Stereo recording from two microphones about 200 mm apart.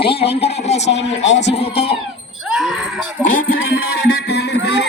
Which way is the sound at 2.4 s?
Centre (ahead or behind).